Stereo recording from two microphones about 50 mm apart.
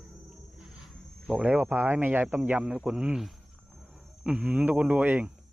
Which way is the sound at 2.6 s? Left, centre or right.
Centre.